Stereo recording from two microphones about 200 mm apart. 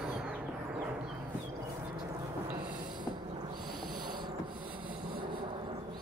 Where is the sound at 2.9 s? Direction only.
20° right (ahead or behind).